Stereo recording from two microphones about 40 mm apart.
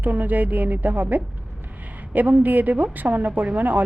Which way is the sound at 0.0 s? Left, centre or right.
Right.